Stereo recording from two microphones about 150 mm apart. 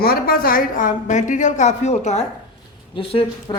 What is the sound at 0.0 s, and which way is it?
A woman's voice, 90° left.